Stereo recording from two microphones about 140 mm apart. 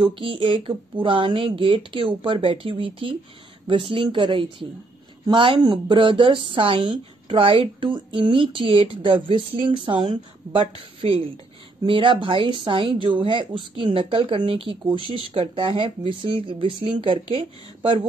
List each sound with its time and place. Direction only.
0.0 s speech: 40° right (ahead or behind)